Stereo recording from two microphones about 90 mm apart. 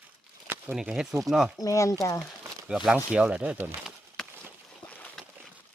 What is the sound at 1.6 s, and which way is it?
Speech, 35° left (ahead or behind).